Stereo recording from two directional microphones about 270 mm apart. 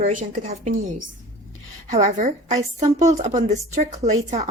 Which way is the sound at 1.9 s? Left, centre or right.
Right.